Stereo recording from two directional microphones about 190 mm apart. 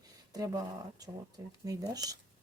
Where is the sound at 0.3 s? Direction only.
20° right (ahead or behind).